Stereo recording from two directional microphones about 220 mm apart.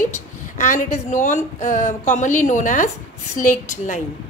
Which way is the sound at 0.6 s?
35° left (ahead or behind).